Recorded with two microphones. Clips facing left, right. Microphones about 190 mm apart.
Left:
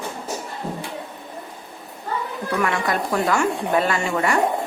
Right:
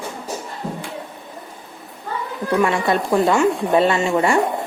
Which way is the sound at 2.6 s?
25° right (ahead or behind).